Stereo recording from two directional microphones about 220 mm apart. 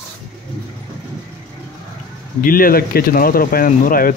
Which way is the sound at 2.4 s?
40° left (ahead or behind).